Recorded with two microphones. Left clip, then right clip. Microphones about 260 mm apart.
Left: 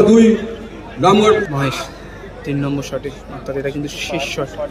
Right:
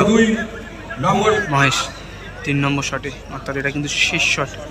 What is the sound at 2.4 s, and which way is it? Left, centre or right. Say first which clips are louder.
A man's voice: right 2 dB; centre.